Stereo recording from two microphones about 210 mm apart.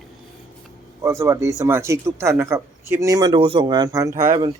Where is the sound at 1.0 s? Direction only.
15° right (ahead or behind).